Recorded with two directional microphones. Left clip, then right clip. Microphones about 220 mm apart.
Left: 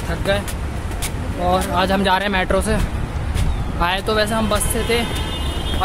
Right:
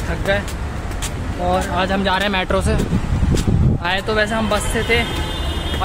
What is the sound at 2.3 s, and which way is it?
Speech, 5° right (ahead or behind).